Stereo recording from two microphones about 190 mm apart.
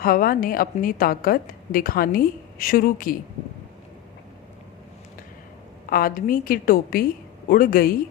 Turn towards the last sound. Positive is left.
turn(degrees=50)  # may be behind; listen again after turning